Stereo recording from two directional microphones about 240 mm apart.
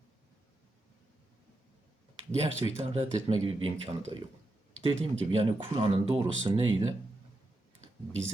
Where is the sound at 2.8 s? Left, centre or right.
Right.